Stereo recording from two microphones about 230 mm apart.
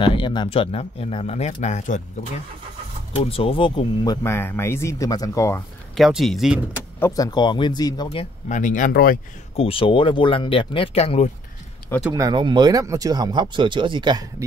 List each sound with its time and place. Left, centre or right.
0.0 s speech: left
3.2 s speech: left
5.9 s speech: centre
7.0 s speech: centre; by 9.2 s left
9.6 s speech: left
12.1 s speech: centre